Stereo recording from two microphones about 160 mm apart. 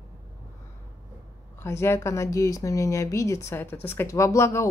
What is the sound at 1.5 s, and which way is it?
A woman's voice, 15° left (ahead or behind).